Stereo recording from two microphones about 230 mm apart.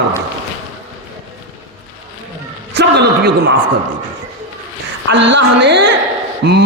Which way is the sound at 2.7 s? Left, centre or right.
Right.